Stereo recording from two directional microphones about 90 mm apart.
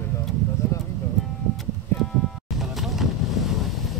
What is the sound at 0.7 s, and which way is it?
Music, 35° left (ahead or behind).